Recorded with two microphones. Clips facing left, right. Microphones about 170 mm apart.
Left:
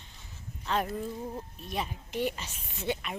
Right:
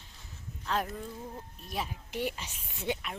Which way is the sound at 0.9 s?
20° left (ahead or behind).